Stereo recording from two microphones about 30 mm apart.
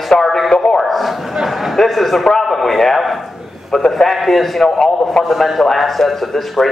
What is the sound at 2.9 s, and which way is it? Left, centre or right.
Speech, centre.